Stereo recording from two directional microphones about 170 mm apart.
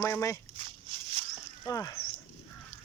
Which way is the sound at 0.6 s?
30° right (ahead or behind).